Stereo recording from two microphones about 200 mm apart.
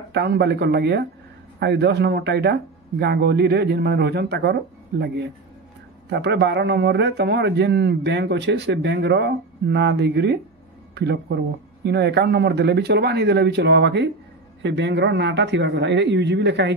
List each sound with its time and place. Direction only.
0.1 s a man's voice: 55° right (ahead or behind)